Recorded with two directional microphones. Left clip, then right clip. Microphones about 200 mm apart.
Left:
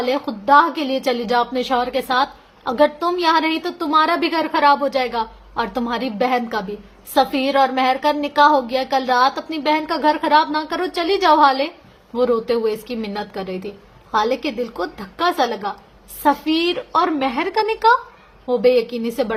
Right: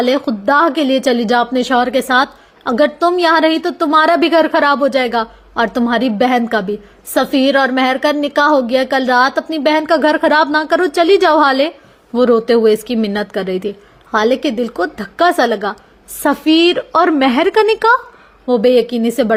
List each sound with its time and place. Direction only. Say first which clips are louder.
0.0 s a woman's voice: right 6 dB; 30° right (ahead or behind)